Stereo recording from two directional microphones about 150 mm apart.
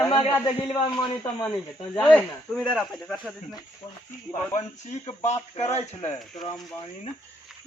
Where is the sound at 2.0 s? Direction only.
5° left (ahead or behind).